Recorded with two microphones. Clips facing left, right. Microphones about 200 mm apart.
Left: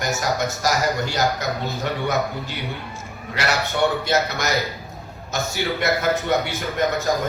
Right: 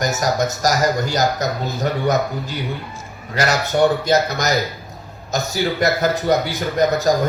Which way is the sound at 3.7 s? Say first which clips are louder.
Right 6 dB; 40° right (ahead or behind).